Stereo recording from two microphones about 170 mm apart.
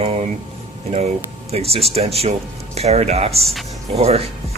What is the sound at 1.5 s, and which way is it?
Speech, 35° right (ahead or behind).